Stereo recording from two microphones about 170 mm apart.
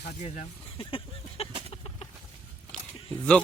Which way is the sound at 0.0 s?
40° left (ahead or behind).